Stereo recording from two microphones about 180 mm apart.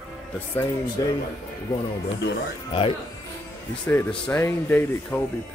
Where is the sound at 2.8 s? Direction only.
30° left (ahead or behind).